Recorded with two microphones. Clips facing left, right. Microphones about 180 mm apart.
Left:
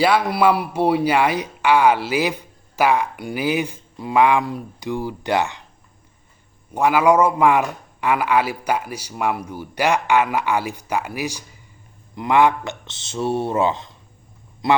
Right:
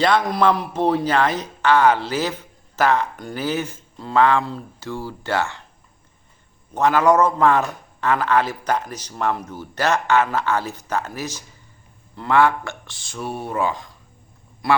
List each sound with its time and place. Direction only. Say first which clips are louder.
0.0 s a man's voice: left 1 dB; 10° left (ahead or behind)
6.7 s a man's voice: left 1 dB; 10° left (ahead or behind)